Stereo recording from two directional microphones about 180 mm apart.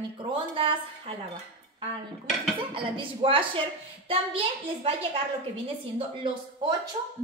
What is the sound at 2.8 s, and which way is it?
A woman's voice, 30° right (ahead or behind).